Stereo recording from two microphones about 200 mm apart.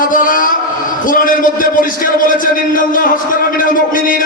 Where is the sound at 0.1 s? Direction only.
45° left (ahead or behind).